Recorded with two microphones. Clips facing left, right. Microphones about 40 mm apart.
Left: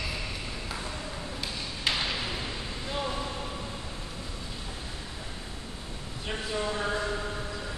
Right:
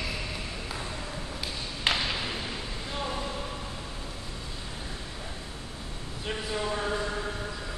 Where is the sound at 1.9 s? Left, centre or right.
Right.